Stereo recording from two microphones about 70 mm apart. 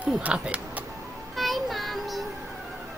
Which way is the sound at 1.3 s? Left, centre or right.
Centre.